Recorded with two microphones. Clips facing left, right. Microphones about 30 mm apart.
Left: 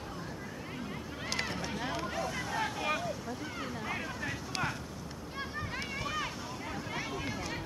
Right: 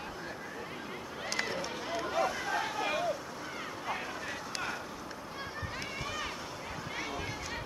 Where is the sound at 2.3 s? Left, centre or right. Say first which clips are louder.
Right 1 dB; centre.